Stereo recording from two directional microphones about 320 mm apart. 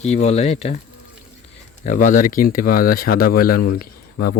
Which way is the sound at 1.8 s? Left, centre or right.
Left.